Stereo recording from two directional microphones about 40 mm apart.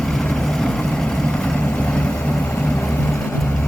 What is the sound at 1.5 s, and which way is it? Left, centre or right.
Vehicle, left.